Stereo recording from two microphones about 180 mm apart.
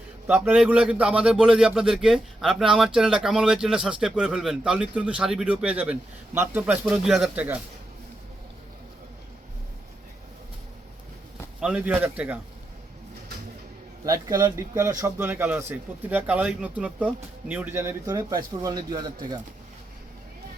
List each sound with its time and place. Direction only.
0.3 s a man's voice: 10° right (ahead or behind)
11.6 s speech: 5° right (ahead or behind)
14.0 s a man's voice: 20° right (ahead or behind)